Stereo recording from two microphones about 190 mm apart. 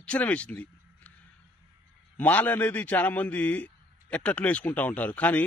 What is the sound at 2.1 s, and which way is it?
A man's voice, 10° left (ahead or behind).